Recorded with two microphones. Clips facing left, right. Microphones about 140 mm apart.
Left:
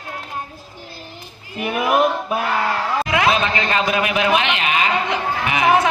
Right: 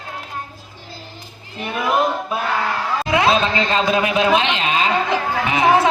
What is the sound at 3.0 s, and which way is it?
A man's voice, 25° right (ahead or behind).